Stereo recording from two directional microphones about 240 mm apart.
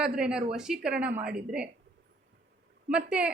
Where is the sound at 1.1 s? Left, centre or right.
Right.